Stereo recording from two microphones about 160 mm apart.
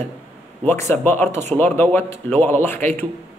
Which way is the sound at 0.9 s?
10° left (ahead or behind).